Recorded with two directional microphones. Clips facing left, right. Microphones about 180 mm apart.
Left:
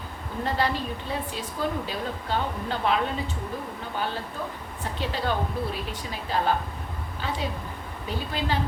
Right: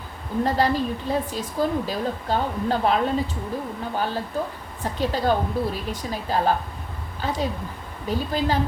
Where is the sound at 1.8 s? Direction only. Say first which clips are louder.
Right 5 dB; 40° right (ahead or behind).